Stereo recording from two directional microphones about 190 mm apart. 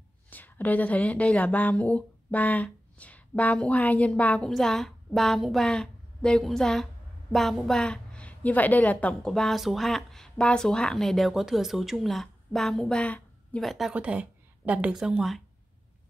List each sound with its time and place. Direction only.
0.3 s a woman's voice: 10° left (ahead or behind)